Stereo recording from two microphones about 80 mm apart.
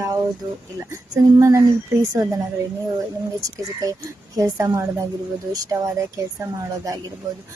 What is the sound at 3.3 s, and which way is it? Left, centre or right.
Speech, right.